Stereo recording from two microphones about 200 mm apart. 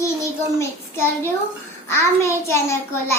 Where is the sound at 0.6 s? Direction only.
10° left (ahead or behind).